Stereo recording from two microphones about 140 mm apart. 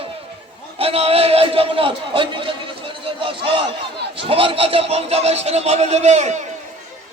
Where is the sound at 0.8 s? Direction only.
45° right (ahead or behind).